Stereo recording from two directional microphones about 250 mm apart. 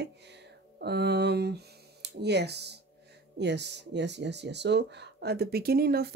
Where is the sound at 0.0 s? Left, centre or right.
Right.